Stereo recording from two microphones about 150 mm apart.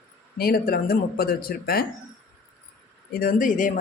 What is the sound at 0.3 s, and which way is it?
Speech, 90° left.